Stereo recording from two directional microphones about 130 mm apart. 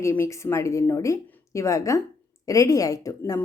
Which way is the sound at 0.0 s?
20° left (ahead or behind).